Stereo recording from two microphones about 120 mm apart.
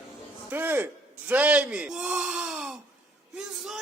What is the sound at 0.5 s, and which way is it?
Speech, 15° right (ahead or behind).